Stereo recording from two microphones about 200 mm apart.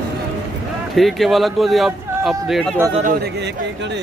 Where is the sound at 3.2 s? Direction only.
60° right (ahead or behind).